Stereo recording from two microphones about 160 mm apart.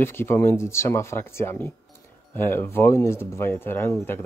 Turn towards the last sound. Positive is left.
turn(degrees=15)  # may be behind; listen again after turning